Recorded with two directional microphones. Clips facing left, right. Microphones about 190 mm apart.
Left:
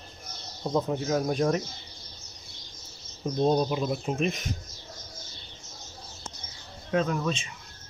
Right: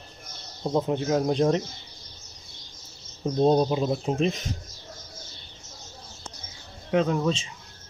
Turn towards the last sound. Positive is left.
turn(degrees=-25)  # may be behind; listen again after turning